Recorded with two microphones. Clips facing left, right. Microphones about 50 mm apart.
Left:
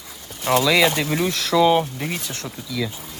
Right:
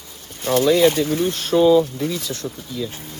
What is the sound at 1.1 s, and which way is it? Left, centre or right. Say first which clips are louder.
Speech: right 1 dB; left.